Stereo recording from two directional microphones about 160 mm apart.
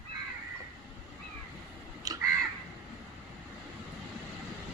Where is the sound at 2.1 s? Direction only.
20° right (ahead or behind).